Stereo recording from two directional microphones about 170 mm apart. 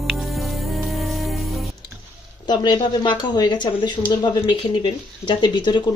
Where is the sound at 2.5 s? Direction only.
25° left (ahead or behind).